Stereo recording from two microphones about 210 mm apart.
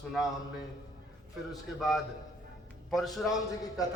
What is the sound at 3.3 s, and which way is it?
Speech, 15° left (ahead or behind).